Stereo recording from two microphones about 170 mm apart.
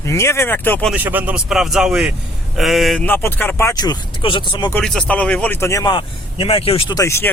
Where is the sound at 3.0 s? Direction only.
10° left (ahead or behind).